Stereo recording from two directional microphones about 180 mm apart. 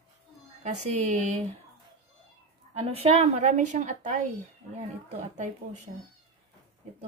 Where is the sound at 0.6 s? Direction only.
40° right (ahead or behind).